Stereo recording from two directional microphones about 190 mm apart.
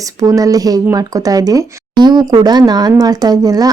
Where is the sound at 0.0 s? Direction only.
15° right (ahead or behind).